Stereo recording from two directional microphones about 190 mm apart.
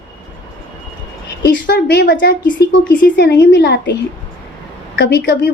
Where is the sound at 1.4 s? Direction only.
65° left (ahead or behind).